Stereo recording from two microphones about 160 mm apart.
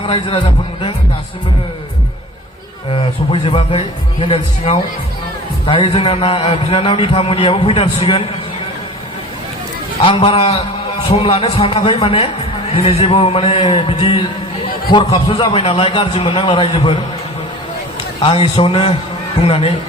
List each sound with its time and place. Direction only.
0.1 s speech: 35° left (ahead or behind)
2.9 s speech: 35° left (ahead or behind)
10.0 s speech: 35° left (ahead or behind)
18.2 s speech: 35° left (ahead or behind)